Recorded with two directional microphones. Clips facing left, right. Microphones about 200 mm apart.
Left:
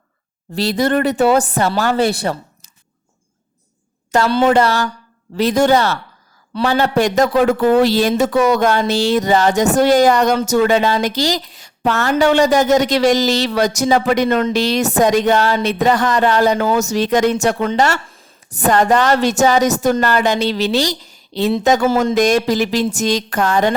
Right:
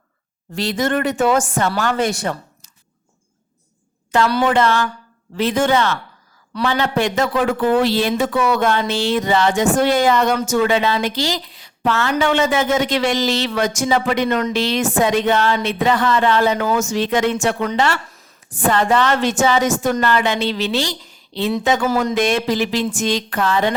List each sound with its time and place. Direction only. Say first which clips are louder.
0.5 s speech: left 3 dB; 35° left (ahead or behind)
4.1 s a woman's voice: left 3 dB; 40° left (ahead or behind)